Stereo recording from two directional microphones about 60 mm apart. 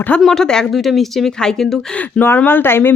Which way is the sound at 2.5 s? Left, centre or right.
Left.